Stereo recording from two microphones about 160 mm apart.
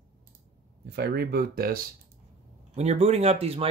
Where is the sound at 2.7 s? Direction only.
45° right (ahead or behind).